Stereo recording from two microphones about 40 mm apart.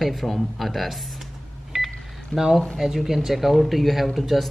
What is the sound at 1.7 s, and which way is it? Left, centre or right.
Telephone dialing, centre.